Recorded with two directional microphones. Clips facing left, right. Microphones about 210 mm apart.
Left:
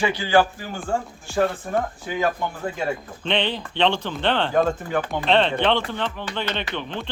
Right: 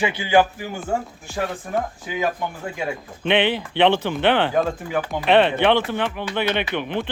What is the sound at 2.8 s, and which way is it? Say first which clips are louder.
Speech: left 1 dB; 10° right (ahead or behind).